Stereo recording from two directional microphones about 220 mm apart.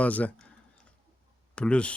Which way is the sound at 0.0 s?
5° left (ahead or behind).